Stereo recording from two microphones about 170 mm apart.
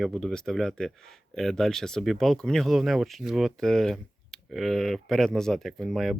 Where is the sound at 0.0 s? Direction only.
Centre (ahead or behind).